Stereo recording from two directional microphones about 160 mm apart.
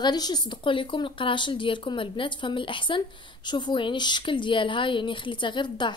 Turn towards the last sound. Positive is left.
turn(degrees=30)  # may be behind; listen again after turning